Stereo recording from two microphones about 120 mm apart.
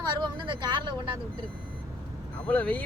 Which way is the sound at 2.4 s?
10° left (ahead or behind).